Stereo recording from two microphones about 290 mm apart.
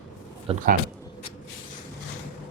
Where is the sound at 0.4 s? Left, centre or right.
Right.